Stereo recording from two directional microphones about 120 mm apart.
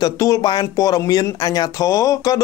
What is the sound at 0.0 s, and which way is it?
Speech, 30° left (ahead or behind).